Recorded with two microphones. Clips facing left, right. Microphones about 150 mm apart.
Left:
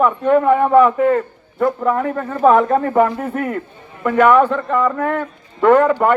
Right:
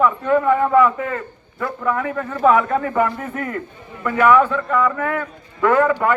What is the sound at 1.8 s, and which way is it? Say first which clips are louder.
A man's voice: left 3 dB; 40° left (ahead or behind).